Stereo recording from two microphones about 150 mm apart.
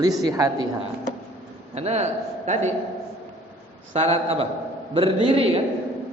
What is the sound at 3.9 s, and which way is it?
A man's voice, 40° right (ahead or behind).